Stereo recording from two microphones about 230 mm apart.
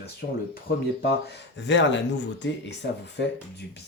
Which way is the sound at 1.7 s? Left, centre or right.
Left.